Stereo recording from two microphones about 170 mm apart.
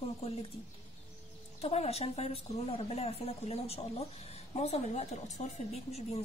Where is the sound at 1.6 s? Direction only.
35° left (ahead or behind).